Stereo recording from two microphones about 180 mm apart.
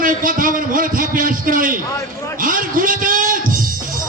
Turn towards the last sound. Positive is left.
turn(degrees=-50)  # may be behind; listen again after turning